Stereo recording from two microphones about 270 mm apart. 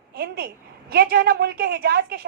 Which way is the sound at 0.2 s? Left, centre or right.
Right.